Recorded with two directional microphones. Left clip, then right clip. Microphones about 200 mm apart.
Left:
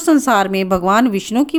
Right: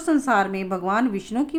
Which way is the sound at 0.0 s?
45° left (ahead or behind).